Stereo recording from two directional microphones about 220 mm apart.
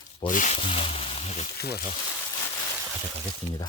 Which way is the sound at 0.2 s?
35° left (ahead or behind).